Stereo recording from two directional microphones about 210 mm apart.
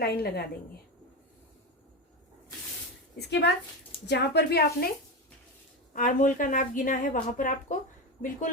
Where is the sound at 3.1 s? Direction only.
55° left (ahead or behind).